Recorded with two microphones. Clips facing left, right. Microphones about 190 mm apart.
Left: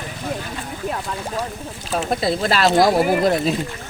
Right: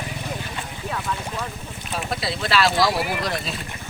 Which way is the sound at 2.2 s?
45° left (ahead or behind).